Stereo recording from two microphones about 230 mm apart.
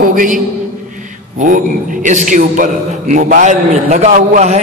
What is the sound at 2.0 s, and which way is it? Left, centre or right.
A man's voice, right.